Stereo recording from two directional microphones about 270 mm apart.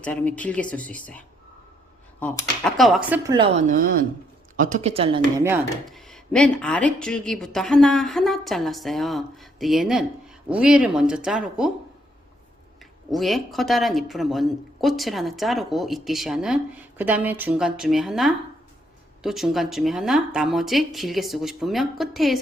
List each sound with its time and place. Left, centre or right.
0.0 s speech: centre
3.2 s speech: centre
5.4 s speech: centre
13.1 s speech: centre